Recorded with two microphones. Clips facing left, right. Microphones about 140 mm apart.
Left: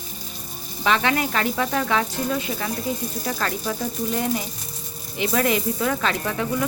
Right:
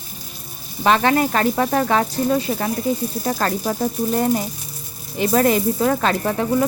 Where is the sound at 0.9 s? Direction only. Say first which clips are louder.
Right 5 dB; 40° right (ahead or behind).